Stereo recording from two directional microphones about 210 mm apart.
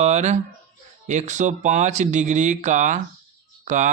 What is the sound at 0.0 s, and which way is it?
Speech, 35° right (ahead or behind).